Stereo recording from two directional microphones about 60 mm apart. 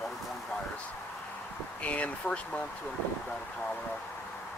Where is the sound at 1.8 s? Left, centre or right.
Left.